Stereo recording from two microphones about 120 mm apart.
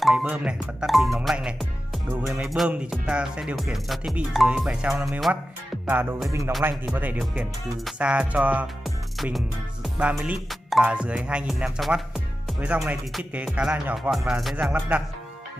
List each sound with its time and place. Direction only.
0.0 s music: 5° right (ahead or behind)
5.9 s music: 15° right (ahead or behind)
8.8 s music: centre (ahead or behind)